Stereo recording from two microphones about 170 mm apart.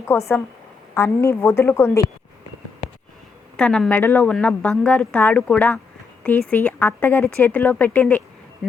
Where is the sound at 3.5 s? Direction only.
5° left (ahead or behind).